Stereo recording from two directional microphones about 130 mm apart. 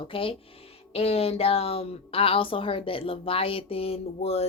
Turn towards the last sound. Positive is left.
turn(degrees=50)  # may be behind; listen again after turning